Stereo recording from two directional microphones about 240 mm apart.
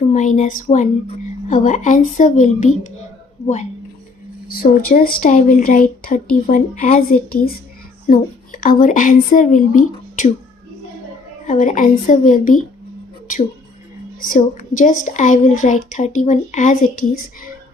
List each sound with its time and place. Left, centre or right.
0.1 s a woman's voice: left
4.5 s a woman's voice: left
11.4 s a woman's voice: left
14.2 s a woman's voice: left